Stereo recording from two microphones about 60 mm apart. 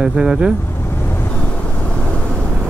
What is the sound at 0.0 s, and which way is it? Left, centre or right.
Speech, centre.